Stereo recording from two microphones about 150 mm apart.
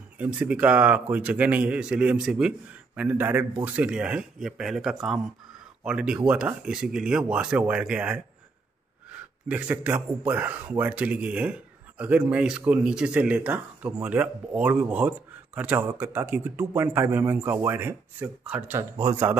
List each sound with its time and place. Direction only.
0.2 s speech: 10° right (ahead or behind)
9.5 s speech: 10° right (ahead or behind)